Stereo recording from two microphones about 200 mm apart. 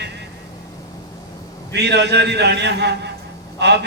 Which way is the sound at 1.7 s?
60° right (ahead or behind).